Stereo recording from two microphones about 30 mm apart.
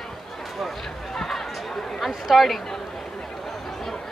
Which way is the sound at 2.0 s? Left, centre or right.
Centre.